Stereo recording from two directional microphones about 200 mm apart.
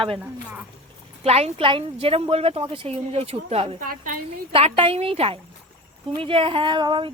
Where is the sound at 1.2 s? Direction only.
30° right (ahead or behind).